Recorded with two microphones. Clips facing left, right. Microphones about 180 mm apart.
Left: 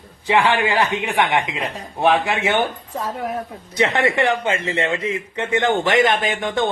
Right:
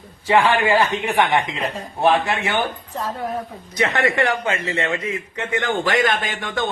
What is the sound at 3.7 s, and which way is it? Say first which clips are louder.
Speech: left 2 dB; 25° left (ahead or behind).